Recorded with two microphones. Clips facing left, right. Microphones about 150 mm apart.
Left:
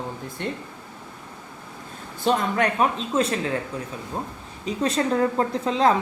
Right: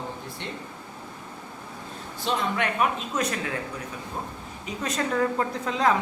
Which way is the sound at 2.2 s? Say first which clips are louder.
Left 5 dB; 35° left (ahead or behind).